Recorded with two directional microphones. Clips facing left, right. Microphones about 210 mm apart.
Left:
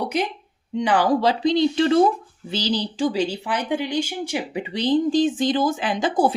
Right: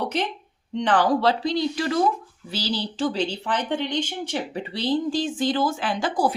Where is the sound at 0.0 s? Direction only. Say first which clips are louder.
Left 2 dB; 10° left (ahead or behind).